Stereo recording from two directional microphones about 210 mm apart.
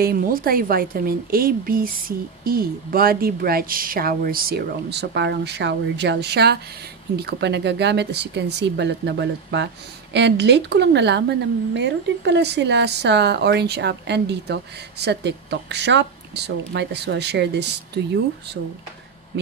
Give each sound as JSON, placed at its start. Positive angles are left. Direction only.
{"t": 0.0, "sound": "a woman's voice", "side_deg": -45}